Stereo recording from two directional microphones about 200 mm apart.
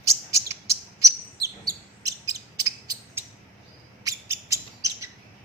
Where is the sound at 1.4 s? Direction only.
15° right (ahead or behind).